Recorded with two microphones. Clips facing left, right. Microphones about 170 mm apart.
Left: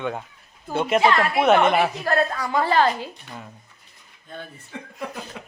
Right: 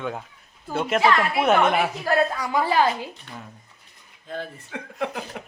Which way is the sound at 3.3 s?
10° left (ahead or behind).